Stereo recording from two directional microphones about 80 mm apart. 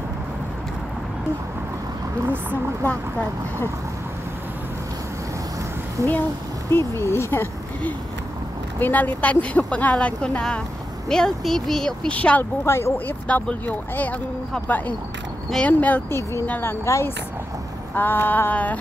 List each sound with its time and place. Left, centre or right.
2.2 s speech: right
6.0 s speech: right
6.7 s speech: left
8.7 s speech: left; by 12.2 s centre
12.2 s speech: centre
12.6 s speech: left
13.3 s speech: centre
15.6 s speech: centre
16.1 s speech: left
16.4 s speech: left
16.8 s speech: left
17.9 s speech: left